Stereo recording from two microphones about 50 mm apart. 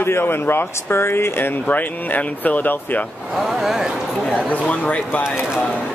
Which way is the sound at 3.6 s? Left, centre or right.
Centre.